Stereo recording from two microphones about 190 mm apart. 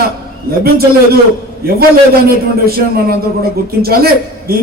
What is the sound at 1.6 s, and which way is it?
A man's voice, 50° right (ahead or behind).